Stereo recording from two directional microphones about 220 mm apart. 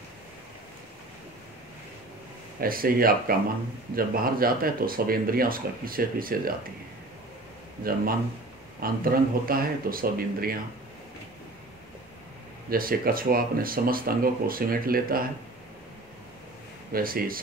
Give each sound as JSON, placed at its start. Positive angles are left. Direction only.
{"t": 2.6, "sound": "speech", "side_deg": -40}
{"t": 8.8, "sound": "speech", "side_deg": -40}
{"t": 12.6, "sound": "speech", "side_deg": -40}
{"t": 16.9, "sound": "speech", "side_deg": -40}